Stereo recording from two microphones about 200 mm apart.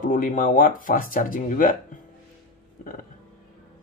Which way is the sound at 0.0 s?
40° left (ahead or behind).